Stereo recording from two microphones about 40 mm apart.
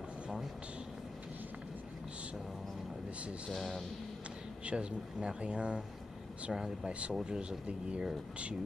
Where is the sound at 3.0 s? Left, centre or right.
Right.